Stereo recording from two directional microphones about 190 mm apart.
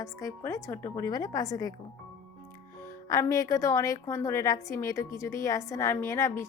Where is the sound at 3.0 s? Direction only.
20° left (ahead or behind).